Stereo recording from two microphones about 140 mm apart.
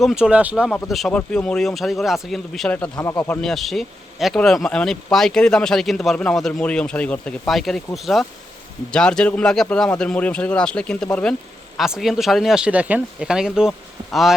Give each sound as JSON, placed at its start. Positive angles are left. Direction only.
{"t": 0.0, "sound": "speech", "side_deg": -5}
{"t": 2.9, "sound": "speech", "side_deg": 25}
{"t": 3.2, "sound": "speech", "side_deg": 5}